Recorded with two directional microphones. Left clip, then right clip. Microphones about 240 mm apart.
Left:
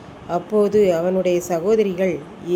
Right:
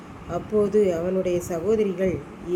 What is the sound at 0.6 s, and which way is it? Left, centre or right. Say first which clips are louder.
A woman's voice: left 5 dB; centre.